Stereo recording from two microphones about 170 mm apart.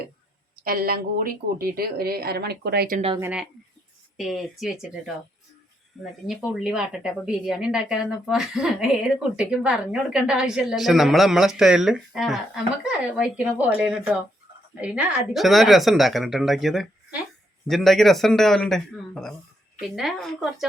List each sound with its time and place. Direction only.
0.6 s a woman's voice: 60° right (ahead or behind)
3.2 s a woman's voice: 10° right (ahead or behind)